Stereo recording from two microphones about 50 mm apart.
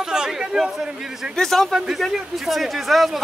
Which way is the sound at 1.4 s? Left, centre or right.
Centre.